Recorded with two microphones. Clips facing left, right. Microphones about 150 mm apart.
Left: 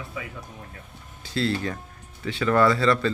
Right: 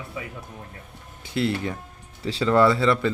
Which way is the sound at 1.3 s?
20° right (ahead or behind).